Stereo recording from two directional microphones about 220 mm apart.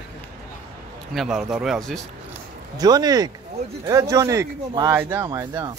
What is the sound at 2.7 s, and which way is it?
A man's voice, 15° right (ahead or behind).